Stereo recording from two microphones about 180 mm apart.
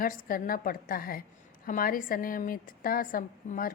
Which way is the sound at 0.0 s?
50° left (ahead or behind).